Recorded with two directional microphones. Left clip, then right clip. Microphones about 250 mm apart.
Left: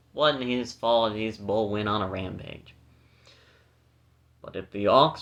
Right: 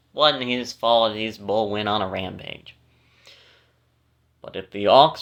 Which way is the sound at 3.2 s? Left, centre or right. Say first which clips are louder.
Right 7 dB; centre.